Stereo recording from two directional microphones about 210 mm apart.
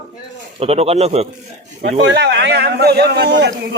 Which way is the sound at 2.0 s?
55° right (ahead or behind).